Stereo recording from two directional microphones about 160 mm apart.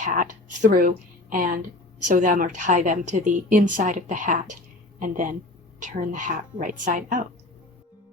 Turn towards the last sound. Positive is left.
turn(degrees=-55)  # may be behind; listen again after turning